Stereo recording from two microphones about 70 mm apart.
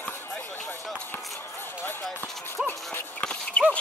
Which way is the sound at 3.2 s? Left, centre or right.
Centre.